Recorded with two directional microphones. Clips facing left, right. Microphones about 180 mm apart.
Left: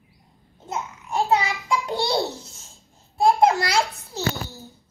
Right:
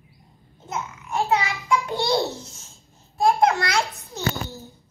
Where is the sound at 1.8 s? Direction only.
15° left (ahead or behind).